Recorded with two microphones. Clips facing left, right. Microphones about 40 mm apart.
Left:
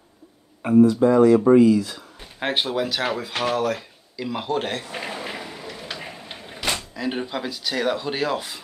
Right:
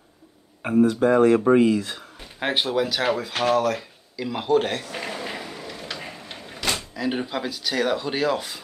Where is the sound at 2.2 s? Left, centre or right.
Centre.